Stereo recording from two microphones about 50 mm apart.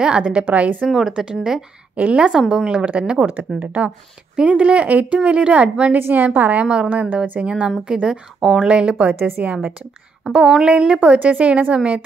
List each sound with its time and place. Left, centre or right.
0.0 s a woman's voice: right
0.5 s speech: right
0.8 s a woman's voice: centre
2.0 s a woman's voice: right
2.8 s a woman's voice: right
5.9 s a woman's voice: right
6.2 s speech: right
6.6 s a woman's voice: right
6.9 s a woman's voice: right; by 8.5 s centre
8.5 s a woman's voice: right
10.2 s a sound: centre
10.6 s a woman's voice: centre